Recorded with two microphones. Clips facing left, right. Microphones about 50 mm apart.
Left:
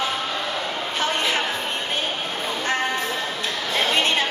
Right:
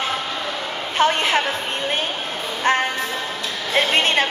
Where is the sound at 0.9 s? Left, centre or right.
Right.